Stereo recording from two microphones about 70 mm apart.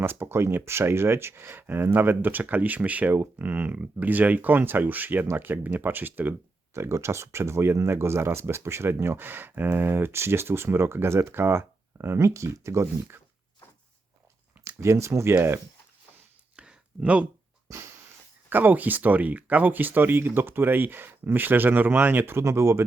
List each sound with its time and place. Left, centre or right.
0.0 s speech: right
6.7 s speech: right
14.8 s speech: right
16.6 s a sound: centre
18.4 s speech: right